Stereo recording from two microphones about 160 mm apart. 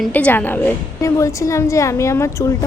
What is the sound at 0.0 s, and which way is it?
A woman's voice, 10° left (ahead or behind).